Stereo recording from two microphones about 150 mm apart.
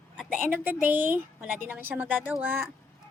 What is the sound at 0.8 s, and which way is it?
A woman's voice, 10° right (ahead or behind).